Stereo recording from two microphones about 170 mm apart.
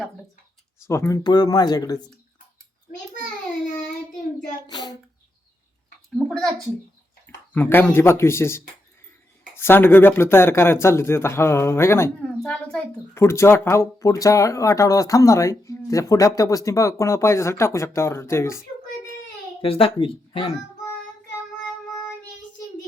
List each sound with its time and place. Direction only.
0.9 s speech: 15° left (ahead or behind)
4.7 s a sound: 25° left (ahead or behind)
6.1 s a child's voice: centre (ahead or behind)
7.5 s speech: 10° left (ahead or behind)
19.6 s speech: 30° left (ahead or behind)